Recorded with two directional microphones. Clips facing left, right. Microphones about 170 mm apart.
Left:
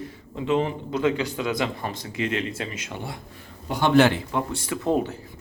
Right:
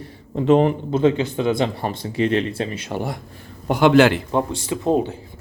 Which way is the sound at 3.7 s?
90° right.